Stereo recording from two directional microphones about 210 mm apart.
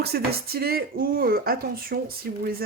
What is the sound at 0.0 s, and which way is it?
Speech, 50° right (ahead or behind).